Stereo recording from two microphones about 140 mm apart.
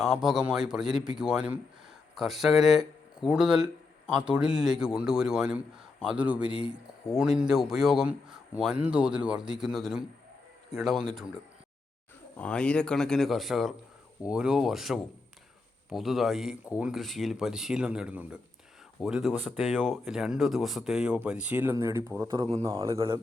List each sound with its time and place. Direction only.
0.0 s speech: 5° right (ahead or behind)
12.4 s speech: 5° left (ahead or behind); by 22.4 s 20° right (ahead or behind)
22.4 s speech: 50° right (ahead or behind)
22.6 s speech: 25° right (ahead or behind)